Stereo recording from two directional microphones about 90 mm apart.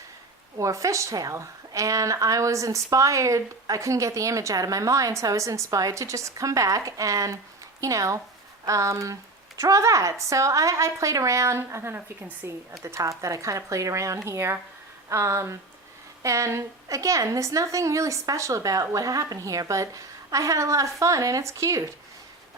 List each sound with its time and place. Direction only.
0.5 s a woman's voice: 35° right (ahead or behind)